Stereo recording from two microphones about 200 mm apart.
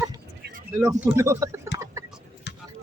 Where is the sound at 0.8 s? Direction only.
15° right (ahead or behind).